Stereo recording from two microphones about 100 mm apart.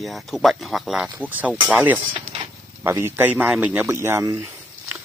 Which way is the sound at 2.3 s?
80° right.